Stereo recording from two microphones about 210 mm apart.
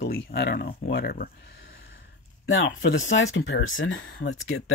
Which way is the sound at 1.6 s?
60° left (ahead or behind).